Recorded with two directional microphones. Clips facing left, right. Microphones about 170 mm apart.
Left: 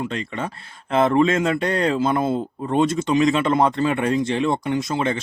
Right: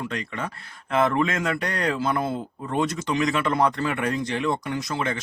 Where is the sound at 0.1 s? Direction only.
25° left (ahead or behind).